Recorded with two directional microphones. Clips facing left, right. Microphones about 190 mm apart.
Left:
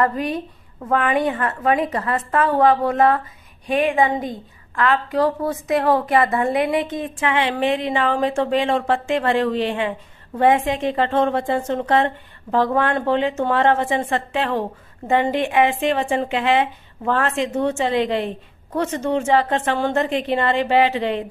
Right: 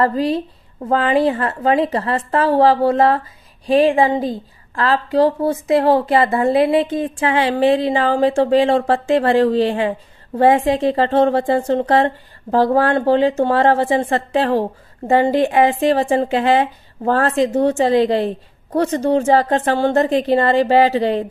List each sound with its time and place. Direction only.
0.0 s a woman's voice: 30° right (ahead or behind)